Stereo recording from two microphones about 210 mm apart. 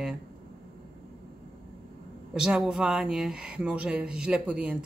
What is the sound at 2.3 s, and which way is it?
Speech, 5° right (ahead or behind).